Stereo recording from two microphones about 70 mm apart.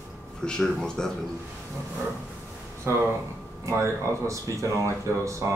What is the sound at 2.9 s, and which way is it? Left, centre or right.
Speech, right.